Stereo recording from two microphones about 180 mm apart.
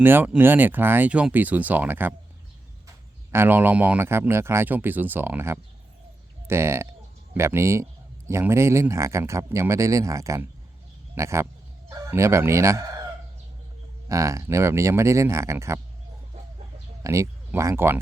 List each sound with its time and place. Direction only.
0.0 s speech: 10° right (ahead or behind)
3.3 s speech: 10° right (ahead or behind)
11.9 s chicken: 15° right (ahead or behind)
14.1 s speech: 15° right (ahead or behind)
17.0 s speech: 15° right (ahead or behind)